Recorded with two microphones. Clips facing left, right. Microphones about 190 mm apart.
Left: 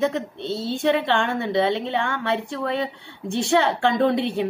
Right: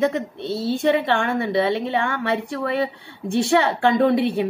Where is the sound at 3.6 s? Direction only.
10° right (ahead or behind).